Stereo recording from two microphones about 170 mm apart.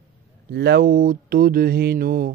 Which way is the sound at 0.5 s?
75° right (ahead or behind).